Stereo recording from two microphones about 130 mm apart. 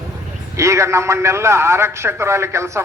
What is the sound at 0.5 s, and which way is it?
A man's voice, 25° right (ahead or behind).